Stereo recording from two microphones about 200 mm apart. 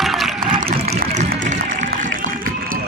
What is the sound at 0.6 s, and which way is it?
Trickle, 30° right (ahead or behind).